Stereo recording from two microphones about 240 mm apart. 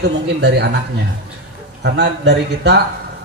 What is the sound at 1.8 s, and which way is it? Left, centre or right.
Speech, right.